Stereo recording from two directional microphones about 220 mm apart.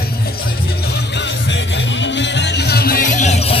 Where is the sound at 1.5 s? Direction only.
55° left (ahead or behind); by 3.5 s 30° left (ahead or behind).